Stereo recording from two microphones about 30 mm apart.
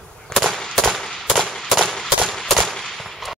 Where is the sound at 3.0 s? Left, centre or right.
Centre.